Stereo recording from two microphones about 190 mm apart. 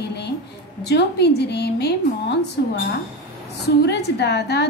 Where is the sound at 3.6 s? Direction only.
60° left (ahead or behind).